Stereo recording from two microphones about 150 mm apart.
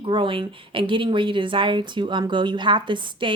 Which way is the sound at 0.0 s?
35° right (ahead or behind).